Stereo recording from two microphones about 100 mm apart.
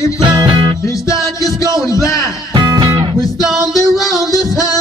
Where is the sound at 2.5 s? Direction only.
45° right (ahead or behind).